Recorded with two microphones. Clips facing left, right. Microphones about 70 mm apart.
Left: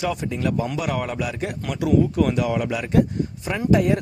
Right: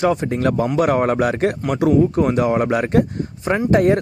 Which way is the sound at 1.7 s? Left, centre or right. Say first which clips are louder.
Right 3 dB; right.